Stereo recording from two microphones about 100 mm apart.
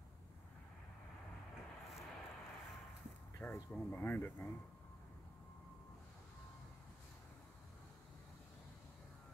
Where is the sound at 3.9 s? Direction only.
20° left (ahead or behind).